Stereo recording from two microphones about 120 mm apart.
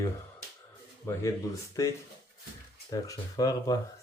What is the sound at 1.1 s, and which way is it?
Speech, 25° left (ahead or behind).